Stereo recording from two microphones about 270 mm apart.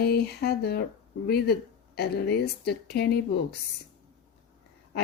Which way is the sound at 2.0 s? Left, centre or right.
Left.